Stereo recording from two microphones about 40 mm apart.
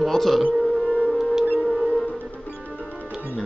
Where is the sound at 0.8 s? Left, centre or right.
Left.